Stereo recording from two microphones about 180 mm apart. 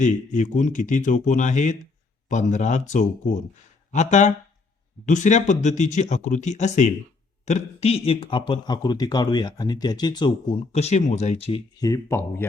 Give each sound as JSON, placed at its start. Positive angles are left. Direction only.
{"t": 0.0, "sound": "speech", "side_deg": 45}
{"t": 11.8, "sound": "speech", "side_deg": 15}